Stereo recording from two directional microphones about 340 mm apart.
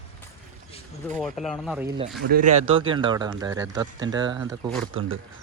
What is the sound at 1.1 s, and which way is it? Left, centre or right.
Speech, centre.